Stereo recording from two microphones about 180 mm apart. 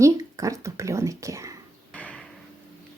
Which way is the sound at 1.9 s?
5° left (ahead or behind).